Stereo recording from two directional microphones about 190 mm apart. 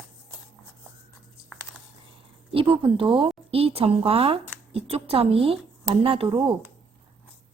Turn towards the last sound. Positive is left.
turn(degrees=-25)  # may be behind; listen again after turning